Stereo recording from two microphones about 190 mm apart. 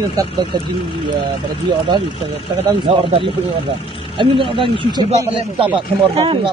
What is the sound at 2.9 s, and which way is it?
Speech, 30° right (ahead or behind).